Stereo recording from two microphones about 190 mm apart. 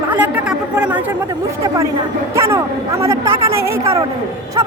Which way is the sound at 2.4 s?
15° right (ahead or behind).